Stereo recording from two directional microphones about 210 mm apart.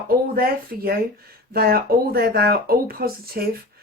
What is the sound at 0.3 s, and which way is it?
A woman's voice, 45° right (ahead or behind).